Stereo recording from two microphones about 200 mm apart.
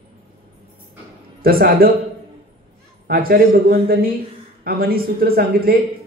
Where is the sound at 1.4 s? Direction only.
50° right (ahead or behind).